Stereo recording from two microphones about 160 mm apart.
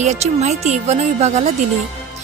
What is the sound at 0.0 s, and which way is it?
A woman's voice, 45° right (ahead or behind).